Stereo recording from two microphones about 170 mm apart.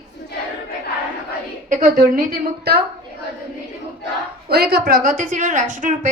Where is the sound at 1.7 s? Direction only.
55° right (ahead or behind); by 2.8 s 70° right (ahead or behind).